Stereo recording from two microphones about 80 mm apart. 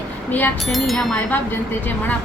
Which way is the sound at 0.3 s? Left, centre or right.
Left.